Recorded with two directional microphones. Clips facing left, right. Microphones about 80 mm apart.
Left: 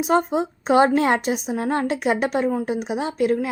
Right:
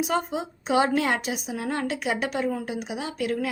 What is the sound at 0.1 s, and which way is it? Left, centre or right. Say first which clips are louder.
A woman's voice: left 7 dB; left.